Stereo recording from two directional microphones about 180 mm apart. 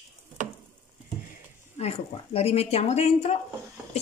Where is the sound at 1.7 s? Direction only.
35° left (ahead or behind).